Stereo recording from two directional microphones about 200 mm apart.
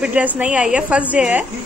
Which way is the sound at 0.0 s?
5° right (ahead or behind).